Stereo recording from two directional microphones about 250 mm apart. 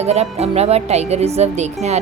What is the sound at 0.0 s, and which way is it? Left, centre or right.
Speech, right.